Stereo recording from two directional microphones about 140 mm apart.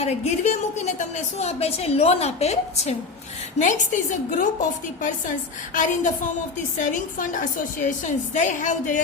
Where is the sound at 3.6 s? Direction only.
65° left (ahead or behind).